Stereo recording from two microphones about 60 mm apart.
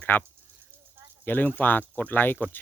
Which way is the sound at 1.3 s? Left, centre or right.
Left.